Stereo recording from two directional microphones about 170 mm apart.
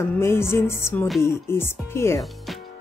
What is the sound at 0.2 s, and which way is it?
Speech, 15° left (ahead or behind).